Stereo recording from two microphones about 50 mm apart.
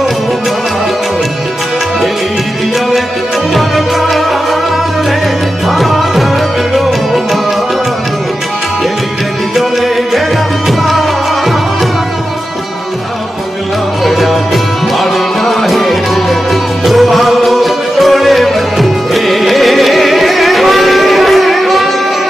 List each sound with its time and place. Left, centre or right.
3.5 s music: centre
5.7 s music: centre
9.6 s music: centre
14.0 s music: centre